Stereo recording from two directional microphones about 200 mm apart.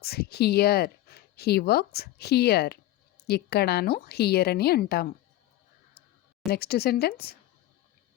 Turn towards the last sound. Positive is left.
turn(degrees=50)  # may be behind; listen again after turning